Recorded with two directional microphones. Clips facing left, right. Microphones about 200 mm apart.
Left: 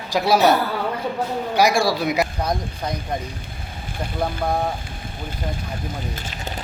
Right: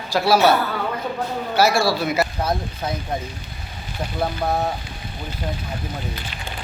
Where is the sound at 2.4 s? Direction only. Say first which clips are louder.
Right 1 dB; 5° right (ahead or behind).